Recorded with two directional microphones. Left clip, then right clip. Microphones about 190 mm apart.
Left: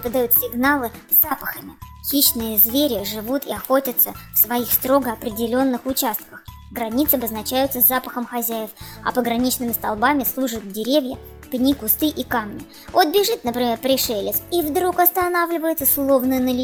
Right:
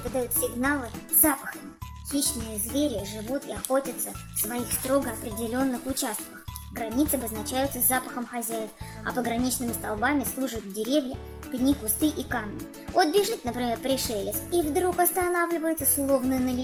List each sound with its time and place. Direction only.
0.2 s speech: 40° left (ahead or behind)
2.7 s a child's voice: 45° left (ahead or behind)